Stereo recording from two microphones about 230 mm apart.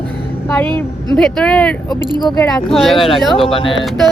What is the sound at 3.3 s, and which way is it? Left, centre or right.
Speech, left.